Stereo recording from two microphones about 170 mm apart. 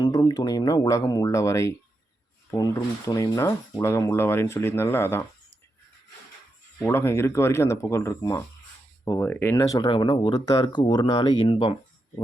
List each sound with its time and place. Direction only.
0.0 s speech: 25° left (ahead or behind)
6.8 s speech: 15° left (ahead or behind); by 11.7 s 30° left (ahead or behind)